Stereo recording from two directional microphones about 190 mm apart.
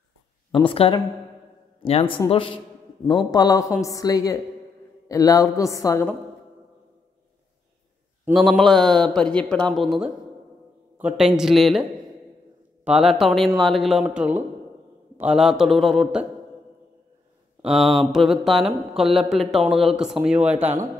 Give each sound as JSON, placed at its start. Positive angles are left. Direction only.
{"t": 0.5, "sound": "a woman's voice", "side_deg": 25}
{"t": 8.3, "sound": "mantra", "side_deg": 0}
{"t": 12.8, "sound": "mantra", "side_deg": 0}
{"t": 17.6, "sound": "mantra", "side_deg": 0}